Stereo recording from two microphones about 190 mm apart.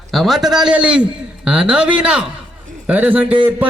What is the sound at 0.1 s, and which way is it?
A man's voice, centre (ahead or behind).